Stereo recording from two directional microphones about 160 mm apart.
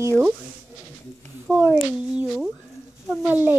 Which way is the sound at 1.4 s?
10° right (ahead or behind).